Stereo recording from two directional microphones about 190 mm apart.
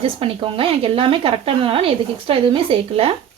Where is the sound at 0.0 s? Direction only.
30° right (ahead or behind).